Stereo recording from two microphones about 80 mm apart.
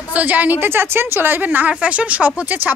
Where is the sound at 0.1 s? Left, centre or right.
Centre.